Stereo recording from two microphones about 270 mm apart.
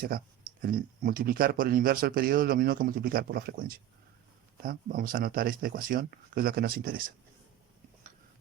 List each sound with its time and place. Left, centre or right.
0.1 s speech: right